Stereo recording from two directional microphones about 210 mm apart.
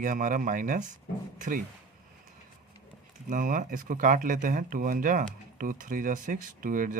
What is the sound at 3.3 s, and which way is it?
Speech, 40° right (ahead or behind).